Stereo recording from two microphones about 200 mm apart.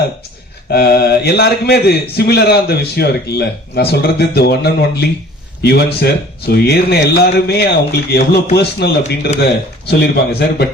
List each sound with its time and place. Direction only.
0.7 s a man's voice: 50° left (ahead or behind)